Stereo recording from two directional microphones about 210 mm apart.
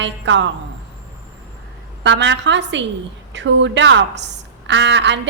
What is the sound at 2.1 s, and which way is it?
A woman's voice, 55° right (ahead or behind).